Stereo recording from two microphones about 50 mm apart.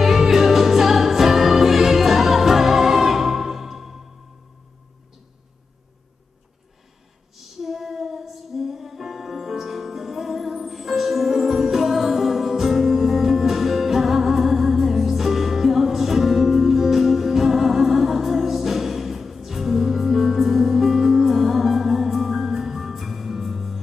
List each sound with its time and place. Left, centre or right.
0.0 s music: centre
7.3 s music: centre